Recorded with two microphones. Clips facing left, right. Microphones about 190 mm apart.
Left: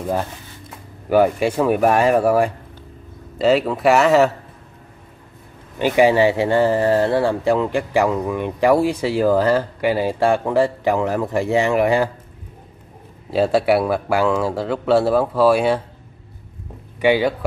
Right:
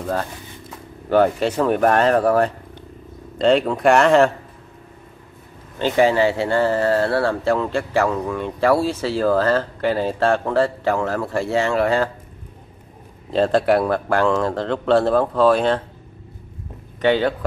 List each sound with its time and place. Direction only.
0.0 s speech: 15° left (ahead or behind)
5.8 s speech: 15° left (ahead or behind)
13.3 s speech: 5° left (ahead or behind)
17.0 s speech: 10° left (ahead or behind)